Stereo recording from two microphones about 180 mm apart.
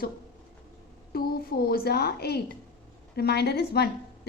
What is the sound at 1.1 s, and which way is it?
A woman's voice, 55° left (ahead or behind).